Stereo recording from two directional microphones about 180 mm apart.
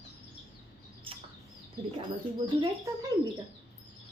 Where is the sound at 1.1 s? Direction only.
30° right (ahead or behind).